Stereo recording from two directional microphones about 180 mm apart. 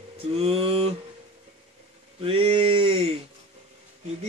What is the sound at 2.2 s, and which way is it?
Speech, 30° right (ahead or behind).